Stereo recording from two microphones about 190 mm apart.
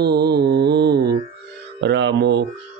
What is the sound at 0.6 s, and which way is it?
Mantra, 60° right (ahead or behind).